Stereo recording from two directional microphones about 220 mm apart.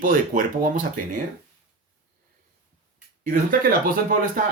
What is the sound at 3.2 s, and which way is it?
Speech, 40° right (ahead or behind).